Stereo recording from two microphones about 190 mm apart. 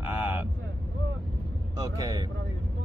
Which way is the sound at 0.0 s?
10° right (ahead or behind).